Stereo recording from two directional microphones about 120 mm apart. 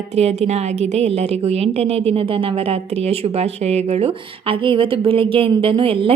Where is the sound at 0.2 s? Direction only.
65° right (ahead or behind).